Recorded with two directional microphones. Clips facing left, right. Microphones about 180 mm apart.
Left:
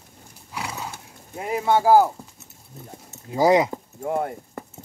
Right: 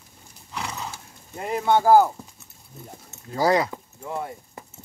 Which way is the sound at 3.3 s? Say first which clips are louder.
Left 3 dB; 20° left (ahead or behind).